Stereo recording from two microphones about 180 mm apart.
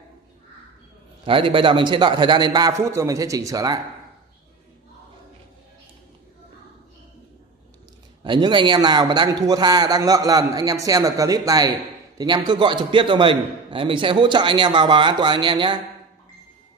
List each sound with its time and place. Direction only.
1.2 s a man's voice: 30° right (ahead or behind)
8.2 s a man's voice: 25° right (ahead or behind)